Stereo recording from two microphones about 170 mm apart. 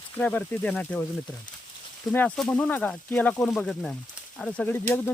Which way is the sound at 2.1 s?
10° left (ahead or behind).